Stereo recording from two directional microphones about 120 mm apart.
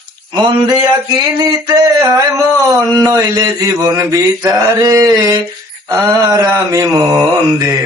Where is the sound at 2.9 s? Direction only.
30° right (ahead or behind).